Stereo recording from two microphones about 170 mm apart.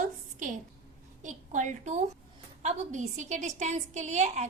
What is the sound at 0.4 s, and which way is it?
A woman's voice, 50° right (ahead or behind).